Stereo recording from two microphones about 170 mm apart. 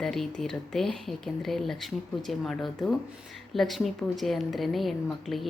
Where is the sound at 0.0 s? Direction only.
Centre (ahead or behind).